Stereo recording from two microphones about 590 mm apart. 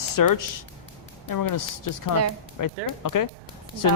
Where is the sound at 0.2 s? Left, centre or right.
Left.